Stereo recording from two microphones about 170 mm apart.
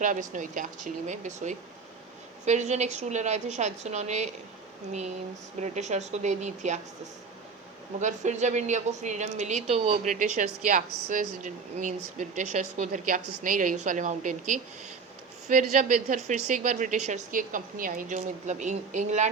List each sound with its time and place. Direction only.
0.0 s a woman's voice: 50° right (ahead or behind)
8.0 s a woman's voice: 45° right (ahead or behind)
15.7 s a woman's voice: 45° right (ahead or behind)